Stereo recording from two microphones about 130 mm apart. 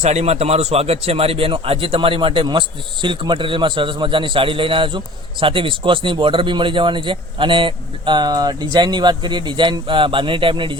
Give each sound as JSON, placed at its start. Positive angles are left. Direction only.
{"t": 0.0, "sound": "a man's voice", "side_deg": -60}